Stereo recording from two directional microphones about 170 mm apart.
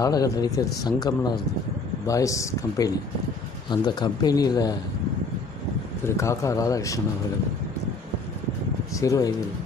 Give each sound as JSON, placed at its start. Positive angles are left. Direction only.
{"t": 0.0, "sound": "speech", "side_deg": 20}
{"t": 6.0, "sound": "speech", "side_deg": 15}
{"t": 8.9, "sound": "speech", "side_deg": 20}